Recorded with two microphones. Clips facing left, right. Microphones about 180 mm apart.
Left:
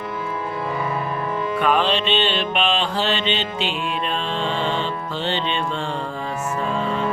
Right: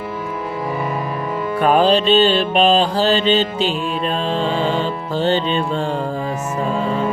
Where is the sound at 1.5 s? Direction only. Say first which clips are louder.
Right 7 dB; 40° right (ahead or behind).